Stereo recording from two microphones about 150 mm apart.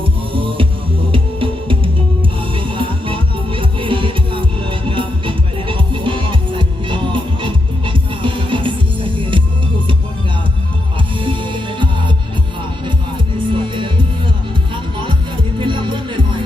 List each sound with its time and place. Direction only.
0.3 s music: 35° right (ahead or behind)
11.2 s music: 35° right (ahead or behind)
13.5 s music: 35° right (ahead or behind)
15.5 s music: 35° right (ahead or behind)